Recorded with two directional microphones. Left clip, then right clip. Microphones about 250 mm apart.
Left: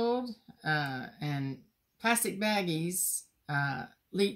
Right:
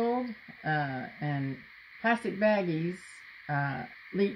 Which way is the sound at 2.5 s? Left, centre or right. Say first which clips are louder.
Right 1 dB; left.